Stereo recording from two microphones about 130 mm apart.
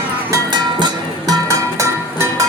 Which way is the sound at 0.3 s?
35° right (ahead or behind).